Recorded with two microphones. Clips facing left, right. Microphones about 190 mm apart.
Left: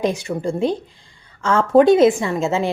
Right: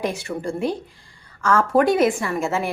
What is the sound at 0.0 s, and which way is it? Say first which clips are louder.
A woman's voice: left 4 dB; 20° left (ahead or behind).